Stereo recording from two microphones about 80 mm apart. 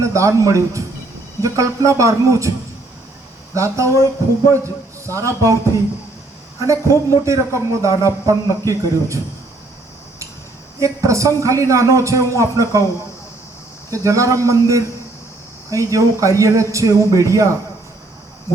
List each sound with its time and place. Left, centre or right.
0.0 s a man's voice: right
3.5 s a man's voice: right
6.9 s a man's voice: right
10.8 s a man's voice: right
13.9 s a man's voice: right